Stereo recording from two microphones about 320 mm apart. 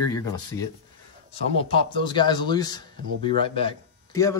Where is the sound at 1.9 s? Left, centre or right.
Centre.